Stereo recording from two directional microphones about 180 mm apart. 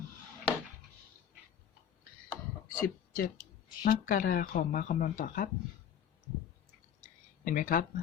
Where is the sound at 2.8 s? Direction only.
50° left (ahead or behind).